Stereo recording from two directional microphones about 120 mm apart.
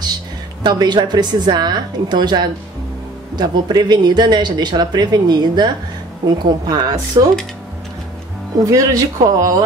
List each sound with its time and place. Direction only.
0.7 s speech: 35° right (ahead or behind)
8.6 s speech: 30° right (ahead or behind)